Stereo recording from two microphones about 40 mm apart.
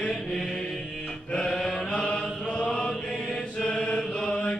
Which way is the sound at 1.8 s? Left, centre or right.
Left.